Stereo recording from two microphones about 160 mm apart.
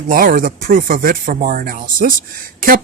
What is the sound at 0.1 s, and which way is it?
Speech, 60° right (ahead or behind).